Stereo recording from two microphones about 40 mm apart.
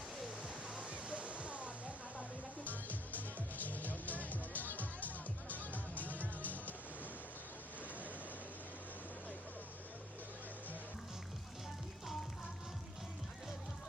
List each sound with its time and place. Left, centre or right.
0.4 s waterfall: right
2.6 s music: left